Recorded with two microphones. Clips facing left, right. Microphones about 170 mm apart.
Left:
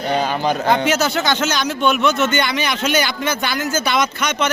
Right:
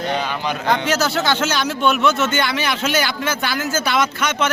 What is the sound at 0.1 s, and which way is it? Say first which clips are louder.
Speech: left 8 dB; 40° left (ahead or behind).